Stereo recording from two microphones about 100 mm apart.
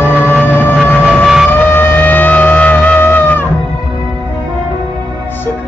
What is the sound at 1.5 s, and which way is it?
Music, 20° left (ahead or behind).